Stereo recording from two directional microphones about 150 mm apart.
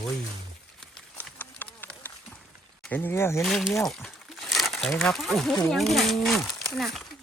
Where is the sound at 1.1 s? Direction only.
10° left (ahead or behind).